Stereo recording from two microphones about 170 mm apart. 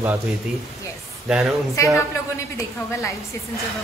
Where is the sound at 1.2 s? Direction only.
5° right (ahead or behind).